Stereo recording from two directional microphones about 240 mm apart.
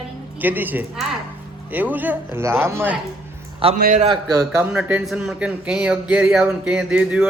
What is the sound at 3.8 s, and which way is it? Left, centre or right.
Speech, right.